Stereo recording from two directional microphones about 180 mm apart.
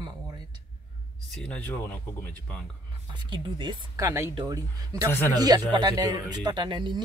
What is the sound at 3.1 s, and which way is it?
Speech, 25° right (ahead or behind).